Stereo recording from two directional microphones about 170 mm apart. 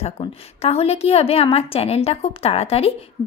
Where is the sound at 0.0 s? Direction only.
35° left (ahead or behind).